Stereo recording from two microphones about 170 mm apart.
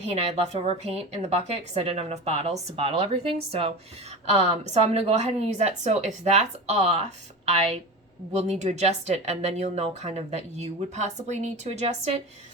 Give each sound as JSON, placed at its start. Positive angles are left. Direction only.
{"t": 0.0, "sound": "speech", "side_deg": -40}